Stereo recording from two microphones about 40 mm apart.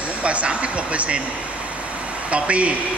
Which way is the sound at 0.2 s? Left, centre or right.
Right.